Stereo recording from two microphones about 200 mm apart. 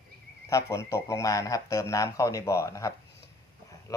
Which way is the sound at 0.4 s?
15° left (ahead or behind).